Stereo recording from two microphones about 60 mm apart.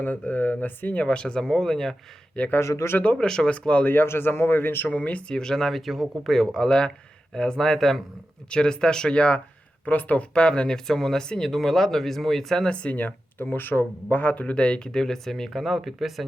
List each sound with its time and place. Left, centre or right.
0.0 s speech: left
1.0 s speech: centre
2.6 s speech: left
3.2 s speech: centre
3.8 s speech: left
5.3 s speech: centre
8.4 s speech: centre
10.3 s speech: centre
12.7 s speech: left; by 16.2 s centre